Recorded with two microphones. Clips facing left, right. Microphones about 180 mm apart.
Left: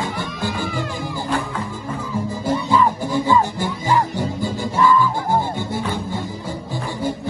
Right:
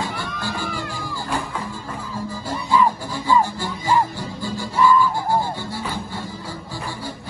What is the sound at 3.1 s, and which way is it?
Music, 20° left (ahead or behind).